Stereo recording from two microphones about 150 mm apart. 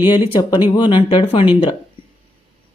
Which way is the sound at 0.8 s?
35° left (ahead or behind).